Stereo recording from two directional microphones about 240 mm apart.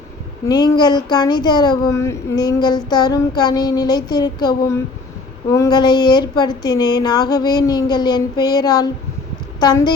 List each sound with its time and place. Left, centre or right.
0.4 s speech: centre